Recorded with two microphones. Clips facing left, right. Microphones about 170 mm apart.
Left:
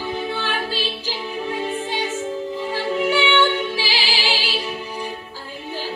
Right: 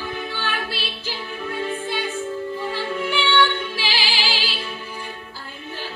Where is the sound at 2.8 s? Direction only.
20° left (ahead or behind).